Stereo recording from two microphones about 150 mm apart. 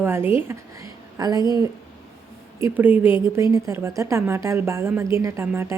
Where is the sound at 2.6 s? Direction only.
10° right (ahead or behind).